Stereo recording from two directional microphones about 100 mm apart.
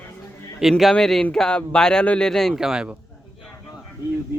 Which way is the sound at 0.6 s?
Centre (ahead or behind).